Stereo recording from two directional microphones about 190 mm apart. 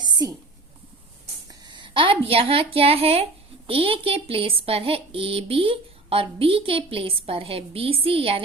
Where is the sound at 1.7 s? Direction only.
25° right (ahead or behind).